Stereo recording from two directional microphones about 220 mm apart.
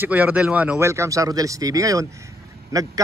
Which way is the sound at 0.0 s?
10° right (ahead or behind).